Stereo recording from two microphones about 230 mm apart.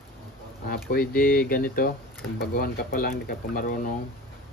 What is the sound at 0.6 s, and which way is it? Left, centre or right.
Speech, left.